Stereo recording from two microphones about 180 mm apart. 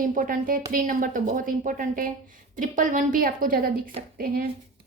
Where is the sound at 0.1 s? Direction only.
50° right (ahead or behind).